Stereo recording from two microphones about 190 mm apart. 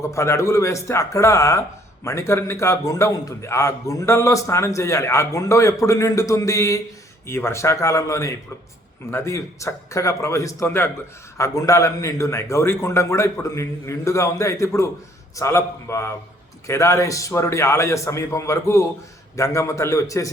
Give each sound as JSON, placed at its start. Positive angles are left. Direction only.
{"t": 0.0, "sound": "a man's voice", "side_deg": 15}